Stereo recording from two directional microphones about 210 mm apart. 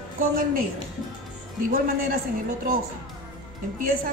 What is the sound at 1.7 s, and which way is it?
Speech, 40° right (ahead or behind).